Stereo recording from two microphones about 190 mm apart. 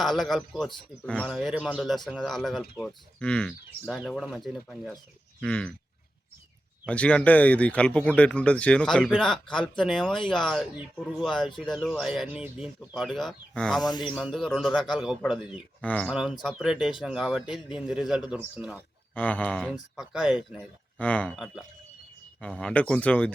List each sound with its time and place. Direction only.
0.0 s speech: centre (ahead or behind)
6.8 s speech: 5° left (ahead or behind)
13.8 s speech: 20° left (ahead or behind)
14.1 s speech: 5° right (ahead or behind)
16.0 s speech: 5° right (ahead or behind)
19.1 s speech: 5° left (ahead or behind)